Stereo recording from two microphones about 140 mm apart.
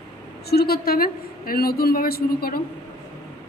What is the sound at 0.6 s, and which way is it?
A woman's voice, 90° left.